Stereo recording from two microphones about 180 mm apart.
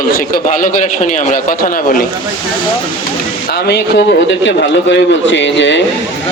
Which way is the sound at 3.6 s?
75° left (ahead or behind).